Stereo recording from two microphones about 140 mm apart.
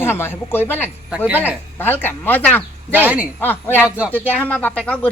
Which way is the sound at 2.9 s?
10° right (ahead or behind).